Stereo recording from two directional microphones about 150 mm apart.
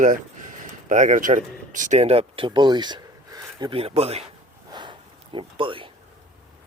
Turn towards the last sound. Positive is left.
turn(degrees=-35)  # may be behind; listen again after turning